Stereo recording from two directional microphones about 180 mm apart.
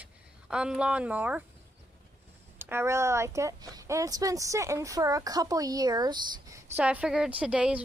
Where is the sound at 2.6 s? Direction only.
15° right (ahead or behind).